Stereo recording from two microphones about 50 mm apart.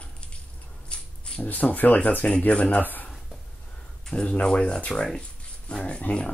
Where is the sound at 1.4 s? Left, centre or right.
Left.